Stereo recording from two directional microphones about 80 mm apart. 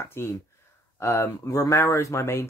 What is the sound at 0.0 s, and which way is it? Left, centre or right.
Speech, left.